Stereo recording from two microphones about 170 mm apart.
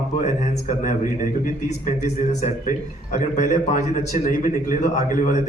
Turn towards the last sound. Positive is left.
turn(degrees=50)  # may be behind; listen again after turning